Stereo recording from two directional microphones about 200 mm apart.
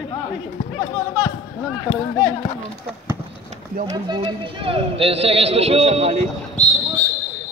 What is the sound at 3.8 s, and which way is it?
A man's voice, 20° right (ahead or behind).